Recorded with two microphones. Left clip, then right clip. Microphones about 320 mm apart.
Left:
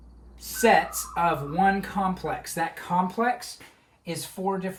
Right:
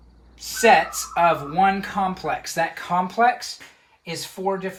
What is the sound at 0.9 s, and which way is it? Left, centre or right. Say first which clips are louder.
Speech: right 6 dB; centre.